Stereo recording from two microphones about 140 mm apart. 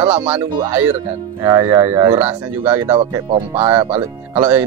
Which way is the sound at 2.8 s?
45° right (ahead or behind).